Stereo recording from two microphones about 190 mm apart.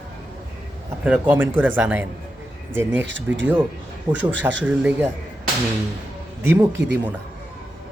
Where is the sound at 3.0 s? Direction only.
75° right (ahead or behind).